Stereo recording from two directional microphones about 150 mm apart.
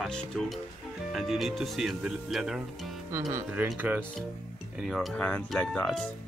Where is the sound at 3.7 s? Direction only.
15° right (ahead or behind).